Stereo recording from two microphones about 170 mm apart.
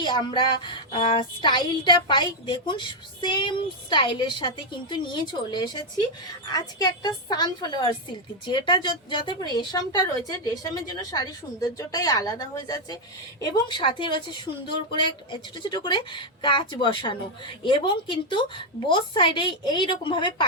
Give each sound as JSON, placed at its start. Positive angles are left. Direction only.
{"t": 0.0, "sound": "speech", "side_deg": 30}